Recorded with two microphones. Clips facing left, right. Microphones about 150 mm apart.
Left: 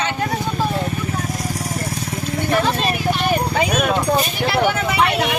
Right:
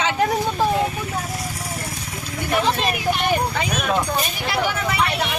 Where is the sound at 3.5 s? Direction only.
60° left (ahead or behind).